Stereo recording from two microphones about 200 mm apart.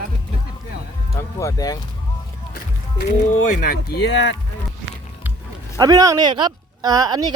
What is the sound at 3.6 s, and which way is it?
Speech, 50° left (ahead or behind).